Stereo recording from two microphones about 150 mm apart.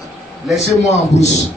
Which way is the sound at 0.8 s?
50° left (ahead or behind).